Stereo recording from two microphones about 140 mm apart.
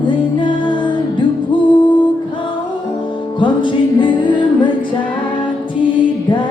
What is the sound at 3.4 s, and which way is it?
Music, 35° left (ahead or behind).